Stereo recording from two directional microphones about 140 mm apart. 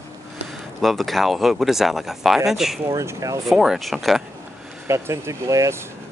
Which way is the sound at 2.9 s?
20° right (ahead or behind).